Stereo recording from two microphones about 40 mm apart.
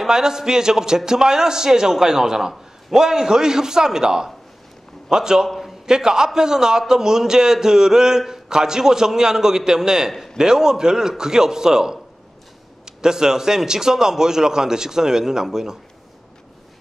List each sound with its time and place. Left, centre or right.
0.0 s a man's voice: centre